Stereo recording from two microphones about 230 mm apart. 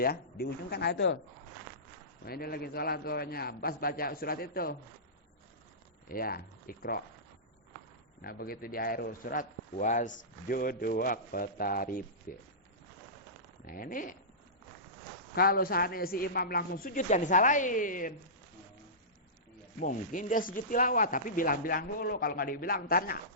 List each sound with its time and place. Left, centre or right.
0.0 s speech: left
2.2 s a man's voice: left
6.1 s speech: left
8.2 s a man's voice: left
13.7 s a man's voice: left
15.4 s a man's voice: left
19.8 s a man's voice: left